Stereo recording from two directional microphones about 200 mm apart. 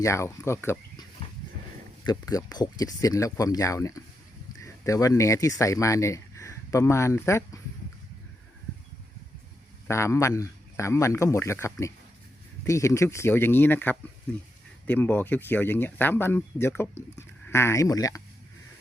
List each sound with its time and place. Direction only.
0.0 s speech: 15° left (ahead or behind)
2.0 s speech: 20° left (ahead or behind)
9.8 s speech: 15° left (ahead or behind)